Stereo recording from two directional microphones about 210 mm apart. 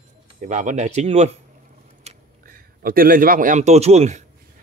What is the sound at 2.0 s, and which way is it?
Speech, 45° right (ahead or behind).